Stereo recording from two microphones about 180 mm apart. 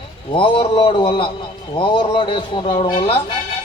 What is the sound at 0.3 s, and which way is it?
A man's voice, 30° left (ahead or behind).